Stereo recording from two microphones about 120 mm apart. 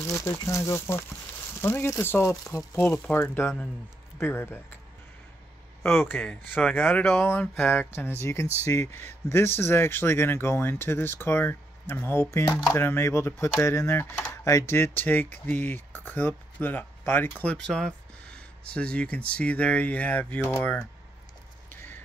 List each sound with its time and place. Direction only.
0.0 s speech: 25° left (ahead or behind)
5.9 s speech: 15° left (ahead or behind)